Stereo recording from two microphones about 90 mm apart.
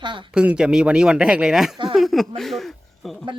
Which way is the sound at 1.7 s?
65° right (ahead or behind).